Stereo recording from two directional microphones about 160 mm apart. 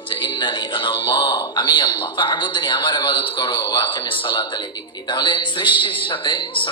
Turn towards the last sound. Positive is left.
turn(degrees=30)  # may be behind; listen again after turning